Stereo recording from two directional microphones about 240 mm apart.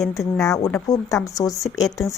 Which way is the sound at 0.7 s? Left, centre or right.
Centre.